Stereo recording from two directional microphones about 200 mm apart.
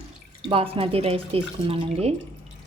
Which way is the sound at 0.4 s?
30° right (ahead or behind).